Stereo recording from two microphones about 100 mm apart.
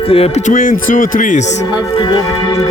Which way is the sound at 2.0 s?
45° left (ahead or behind).